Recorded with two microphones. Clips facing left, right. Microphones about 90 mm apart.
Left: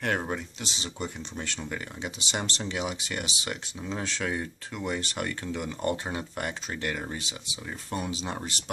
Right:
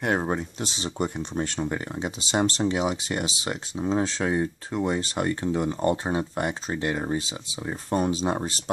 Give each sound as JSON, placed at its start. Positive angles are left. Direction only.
{"t": 0.0, "sound": "speech", "side_deg": -25}
{"t": 0.4, "sound": "speech", "side_deg": -40}